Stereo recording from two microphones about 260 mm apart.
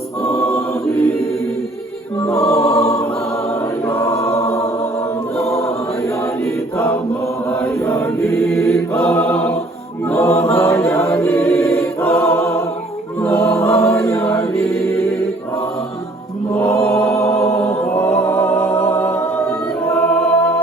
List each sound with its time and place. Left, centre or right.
0.3 s choir: centre
2.2 s choir: centre
2.6 s choir: left
4.0 s choir: centre
5.4 s choir: left
7.6 s choir: centre
10.1 s a capella: centre
11.2 s choir: centre
11.9 s music: centre
13.2 s choir: centre
16.6 s chant: centre
17.4 s music: centre